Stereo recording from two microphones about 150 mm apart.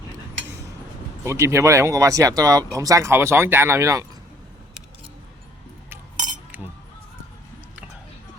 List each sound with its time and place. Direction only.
1.2 s speech: 20° right (ahead or behind)
6.5 s chink: 10° right (ahead or behind)